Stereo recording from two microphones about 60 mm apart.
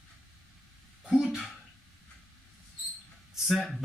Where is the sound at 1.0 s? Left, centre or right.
Centre.